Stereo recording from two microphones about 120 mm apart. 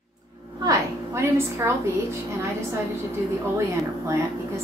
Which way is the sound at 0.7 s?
20° right (ahead or behind).